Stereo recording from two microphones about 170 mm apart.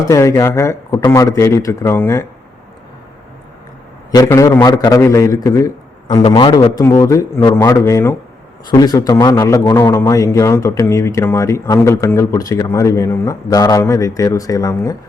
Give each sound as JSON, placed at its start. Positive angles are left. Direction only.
{"t": 0.0, "sound": "speech", "side_deg": 20}
{"t": 4.1, "sound": "a man's voice", "side_deg": 20}